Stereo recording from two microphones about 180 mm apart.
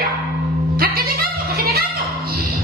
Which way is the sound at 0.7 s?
55° right (ahead or behind).